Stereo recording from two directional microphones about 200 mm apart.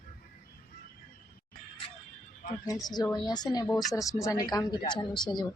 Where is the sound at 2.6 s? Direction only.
20° left (ahead or behind).